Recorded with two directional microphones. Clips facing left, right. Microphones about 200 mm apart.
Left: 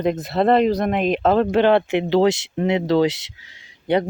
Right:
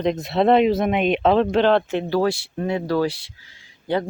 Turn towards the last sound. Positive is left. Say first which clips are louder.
# left 4 dB
turn(degrees=20)  # may be behind; listen again after turning